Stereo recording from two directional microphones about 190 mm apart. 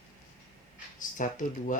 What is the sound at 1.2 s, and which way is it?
Speech, 45° left (ahead or behind).